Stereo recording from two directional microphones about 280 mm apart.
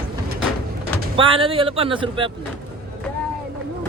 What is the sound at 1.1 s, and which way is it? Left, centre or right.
Speech, centre.